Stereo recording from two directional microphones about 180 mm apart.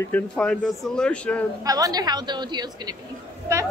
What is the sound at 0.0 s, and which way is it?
Speech, 5° left (ahead or behind).